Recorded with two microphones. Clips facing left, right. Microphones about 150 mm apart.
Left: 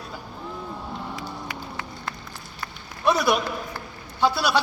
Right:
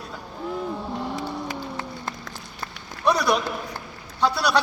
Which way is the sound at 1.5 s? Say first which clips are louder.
Right 4 dB; 30° right (ahead or behind).